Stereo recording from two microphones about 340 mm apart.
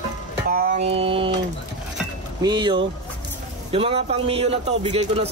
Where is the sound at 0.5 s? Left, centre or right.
Right.